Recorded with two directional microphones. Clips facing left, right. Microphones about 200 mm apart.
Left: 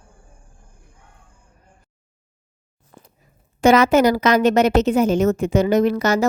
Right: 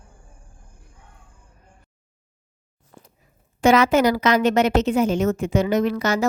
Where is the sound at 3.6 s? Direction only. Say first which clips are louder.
Left 2 dB; 40° left (ahead or behind).